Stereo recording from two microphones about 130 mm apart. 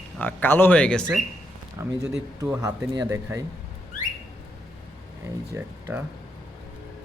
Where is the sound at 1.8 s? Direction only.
20° right (ahead or behind).